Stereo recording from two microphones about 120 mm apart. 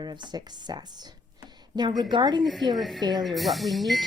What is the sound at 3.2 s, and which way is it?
Speech, centre (ahead or behind).